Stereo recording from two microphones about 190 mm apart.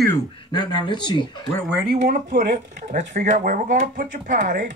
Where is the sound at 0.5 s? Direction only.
20° left (ahead or behind).